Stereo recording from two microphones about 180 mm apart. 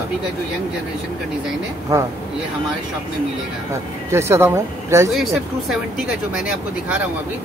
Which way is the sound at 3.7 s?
15° right (ahead or behind).